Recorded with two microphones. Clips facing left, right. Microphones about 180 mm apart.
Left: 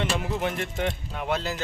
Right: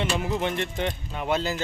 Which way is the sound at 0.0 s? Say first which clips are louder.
Right 1 dB; centre (ahead or behind).